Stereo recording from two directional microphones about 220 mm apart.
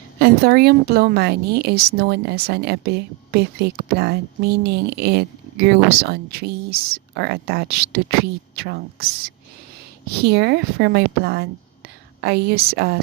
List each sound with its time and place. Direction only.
0.2 s a woman's voice: 45° right (ahead or behind)
10.2 s a woman's voice: 45° right (ahead or behind)